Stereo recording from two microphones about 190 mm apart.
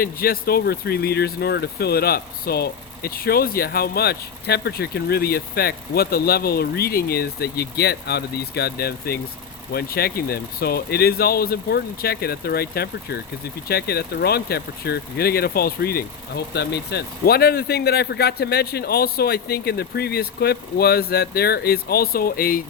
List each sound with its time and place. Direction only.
0.0 s speech: 50° left (ahead or behind)